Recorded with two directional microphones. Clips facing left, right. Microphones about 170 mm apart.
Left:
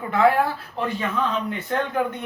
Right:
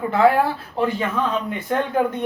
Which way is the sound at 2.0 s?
35° right (ahead or behind).